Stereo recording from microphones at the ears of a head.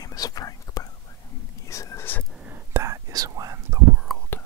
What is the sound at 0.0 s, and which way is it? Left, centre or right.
Whispering, left.